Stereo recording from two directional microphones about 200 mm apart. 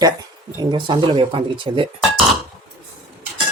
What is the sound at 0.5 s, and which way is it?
Speech, 25° right (ahead or behind).